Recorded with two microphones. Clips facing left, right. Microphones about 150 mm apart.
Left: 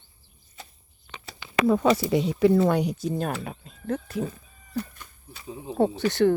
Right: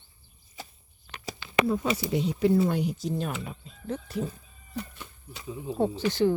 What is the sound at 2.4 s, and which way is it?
Speech, 90° left.